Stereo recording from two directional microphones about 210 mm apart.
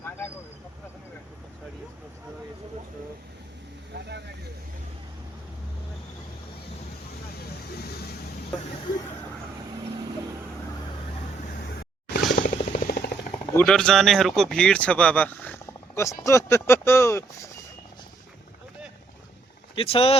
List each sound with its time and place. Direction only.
3.9 s speech: 55° right (ahead or behind)
12.4 s a sound: 45° left (ahead or behind)
13.5 s speech: 5° left (ahead or behind)
19.7 s speech: 25° left (ahead or behind)